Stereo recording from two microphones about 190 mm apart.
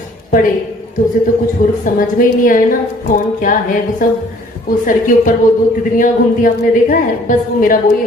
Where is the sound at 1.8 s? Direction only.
45° left (ahead or behind).